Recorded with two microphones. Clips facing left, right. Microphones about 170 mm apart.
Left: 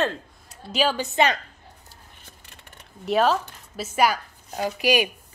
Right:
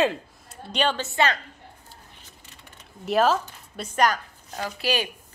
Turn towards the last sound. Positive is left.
turn(degrees=15)  # may be behind; listen again after turning